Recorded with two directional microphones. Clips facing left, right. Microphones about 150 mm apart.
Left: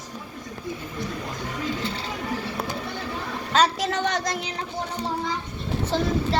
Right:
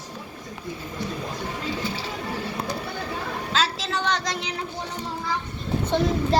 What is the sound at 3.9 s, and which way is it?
Speech, 50° left (ahead or behind).